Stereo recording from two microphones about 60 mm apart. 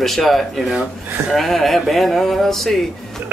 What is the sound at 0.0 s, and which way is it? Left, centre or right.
Speech, centre.